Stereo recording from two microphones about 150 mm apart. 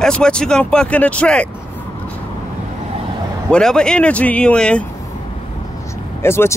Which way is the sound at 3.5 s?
5° left (ahead or behind).